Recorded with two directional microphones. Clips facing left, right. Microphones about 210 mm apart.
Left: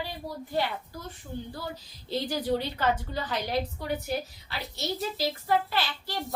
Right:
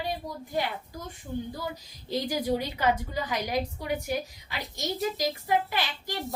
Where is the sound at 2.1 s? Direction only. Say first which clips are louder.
Even; 10° right (ahead or behind).